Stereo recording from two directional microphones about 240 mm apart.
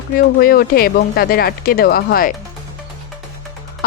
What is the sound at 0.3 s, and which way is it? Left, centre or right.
Speech, left.